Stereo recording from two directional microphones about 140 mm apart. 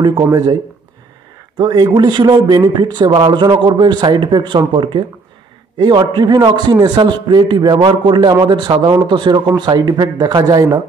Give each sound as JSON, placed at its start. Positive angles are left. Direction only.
{"t": 0.0, "sound": "a man's voice", "side_deg": -30}
{"t": 1.6, "sound": "a man's voice", "side_deg": -30}